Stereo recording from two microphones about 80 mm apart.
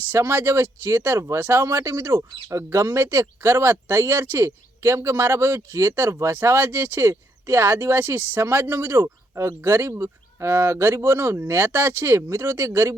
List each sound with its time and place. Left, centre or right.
0.1 s speech: right